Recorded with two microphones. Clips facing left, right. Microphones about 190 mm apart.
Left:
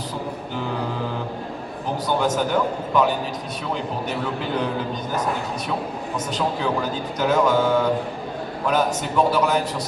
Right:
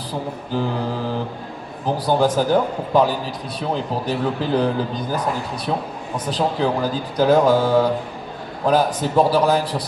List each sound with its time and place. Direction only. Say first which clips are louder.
2.0 s speech: right 4 dB; 35° right (ahead or behind)